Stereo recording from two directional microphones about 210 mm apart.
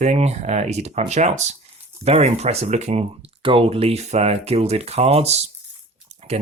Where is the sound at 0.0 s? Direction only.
30° right (ahead or behind).